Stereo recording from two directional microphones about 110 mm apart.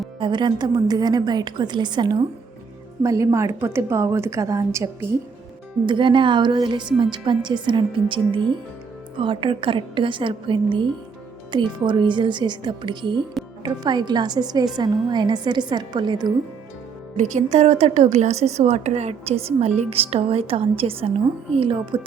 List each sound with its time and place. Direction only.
0.2 s a woman's voice: 45° right (ahead or behind)
3.0 s a woman's voice: 30° right (ahead or behind)
5.8 s a woman's voice: 45° right (ahead or behind)
17.2 s speech: 90° right; by 19.8 s 75° right (ahead or behind)
19.9 s a woman's voice: 65° right (ahead or behind)